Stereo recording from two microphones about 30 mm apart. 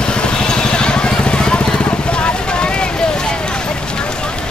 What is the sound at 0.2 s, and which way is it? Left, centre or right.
Vehicle, left.